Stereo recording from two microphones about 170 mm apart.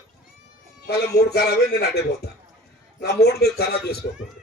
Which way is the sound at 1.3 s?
75° left (ahead or behind).